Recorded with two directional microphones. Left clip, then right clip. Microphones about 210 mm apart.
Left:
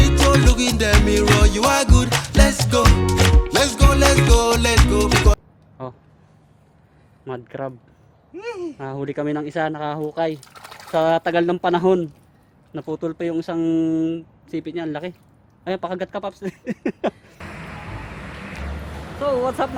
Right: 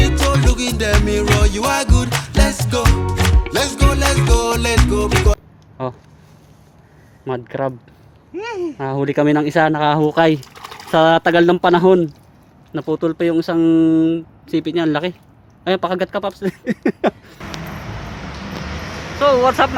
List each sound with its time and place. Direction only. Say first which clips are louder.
0.0 s music: left 1 dB; centre (ahead or behind)
7.3 s speech: right 8 dB; 5° right (ahead or behind)
8.4 s speech: right 5 dB; 10° left (ahead or behind)
8.8 s speech: right 11 dB; 10° right (ahead or behind); by 10.4 s 25° right (ahead or behind)
10.4 s typing: right 5 dB; 10° left (ahead or behind)
10.9 s speech: right 6 dB; 15° right (ahead or behind)
19.2 s speech: right 8 dB; centre (ahead or behind)